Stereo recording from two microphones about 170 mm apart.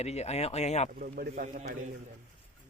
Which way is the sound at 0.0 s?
40° left (ahead or behind).